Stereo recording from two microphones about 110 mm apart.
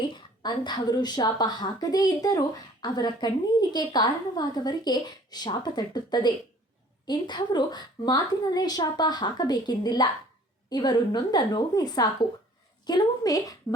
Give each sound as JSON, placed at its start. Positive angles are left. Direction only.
{"t": 0.1, "sound": "a woman's voice", "side_deg": 45}